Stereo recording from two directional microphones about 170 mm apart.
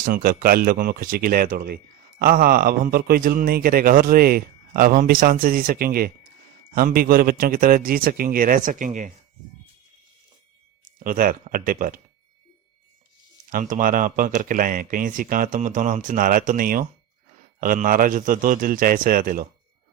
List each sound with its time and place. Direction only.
0.0 s speech: 55° right (ahead or behind)
11.0 s speech: 55° right (ahead or behind)
13.5 s speech: 50° right (ahead or behind)